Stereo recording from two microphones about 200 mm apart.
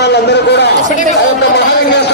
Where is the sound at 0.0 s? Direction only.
55° left (ahead or behind).